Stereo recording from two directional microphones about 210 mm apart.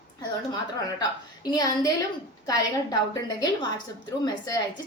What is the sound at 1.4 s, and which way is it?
A woman's voice, 15° left (ahead or behind).